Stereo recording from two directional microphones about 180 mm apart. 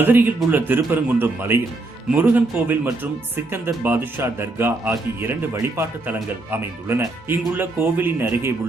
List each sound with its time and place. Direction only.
0.0 s speech: 10° right (ahead or behind)